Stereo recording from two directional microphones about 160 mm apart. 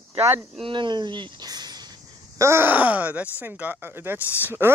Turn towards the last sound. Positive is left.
turn(degrees=-15)  # may be behind; listen again after turning